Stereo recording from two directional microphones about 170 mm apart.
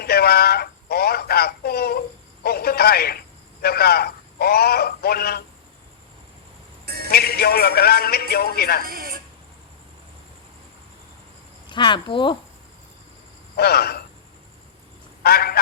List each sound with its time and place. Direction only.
0.0 s a sound: 65° left (ahead or behind)
3.6 s a man's voice: 65° left (ahead or behind)
6.8 s a sound: 65° right (ahead or behind)
7.1 s a man's voice: 65° left (ahead or behind)
8.8 s television: 60° right (ahead or behind)
11.7 s speech: 25° left (ahead or behind)
13.6 s a man's voice: 65° left (ahead or behind)
15.2 s a man's voice: 65° left (ahead or behind)